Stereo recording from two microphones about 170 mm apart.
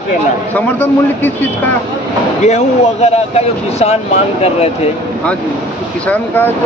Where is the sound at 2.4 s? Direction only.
40° left (ahead or behind).